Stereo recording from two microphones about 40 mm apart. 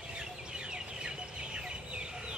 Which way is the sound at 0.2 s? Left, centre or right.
Right.